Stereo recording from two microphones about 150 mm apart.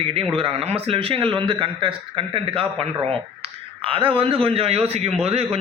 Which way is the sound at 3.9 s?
40° right (ahead or behind).